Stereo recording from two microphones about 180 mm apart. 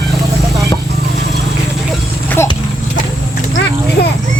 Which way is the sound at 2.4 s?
15° left (ahead or behind).